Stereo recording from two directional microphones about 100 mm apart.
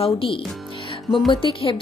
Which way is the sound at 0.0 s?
65° left (ahead or behind).